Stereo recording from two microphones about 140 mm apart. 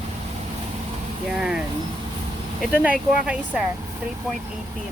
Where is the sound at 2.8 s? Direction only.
10° right (ahead or behind).